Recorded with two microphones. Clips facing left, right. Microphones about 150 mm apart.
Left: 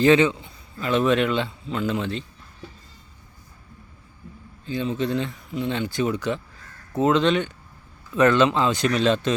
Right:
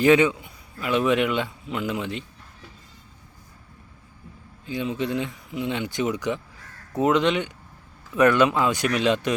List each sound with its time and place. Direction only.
0.0 s a man's voice: 15° right (ahead or behind)
4.6 s speech: 15° right (ahead or behind)